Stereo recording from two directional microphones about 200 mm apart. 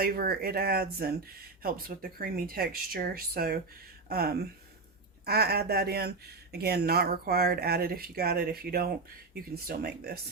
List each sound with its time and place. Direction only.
0.0 s speech: 50° right (ahead or behind)